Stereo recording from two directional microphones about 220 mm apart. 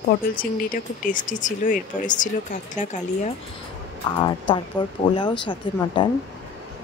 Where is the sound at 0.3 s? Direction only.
40° left (ahead or behind).